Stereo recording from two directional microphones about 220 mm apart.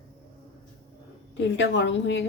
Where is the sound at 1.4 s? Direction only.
55° left (ahead or behind).